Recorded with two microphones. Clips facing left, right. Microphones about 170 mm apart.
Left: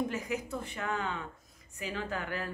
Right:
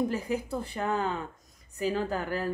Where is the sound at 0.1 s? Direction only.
30° right (ahead or behind).